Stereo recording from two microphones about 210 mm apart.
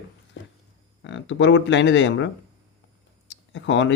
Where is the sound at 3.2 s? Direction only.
60° left (ahead or behind).